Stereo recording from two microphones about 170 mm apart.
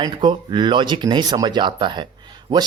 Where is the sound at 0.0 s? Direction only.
25° right (ahead or behind).